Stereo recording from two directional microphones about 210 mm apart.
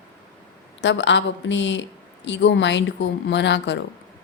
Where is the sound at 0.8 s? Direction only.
60° left (ahead or behind).